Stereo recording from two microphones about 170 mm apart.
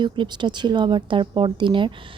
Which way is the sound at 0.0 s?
25° right (ahead or behind).